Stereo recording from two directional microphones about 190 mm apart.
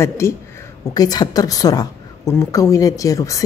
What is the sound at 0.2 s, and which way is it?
A woman's voice, 15° left (ahead or behind).